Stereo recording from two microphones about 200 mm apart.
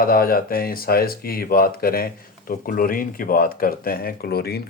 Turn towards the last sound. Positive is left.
turn(degrees=50)  # may be behind; listen again after turning